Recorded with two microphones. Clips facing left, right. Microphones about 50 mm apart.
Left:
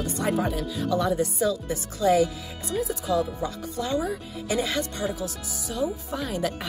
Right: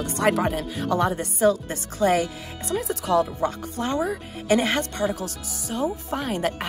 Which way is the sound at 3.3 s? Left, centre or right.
Right.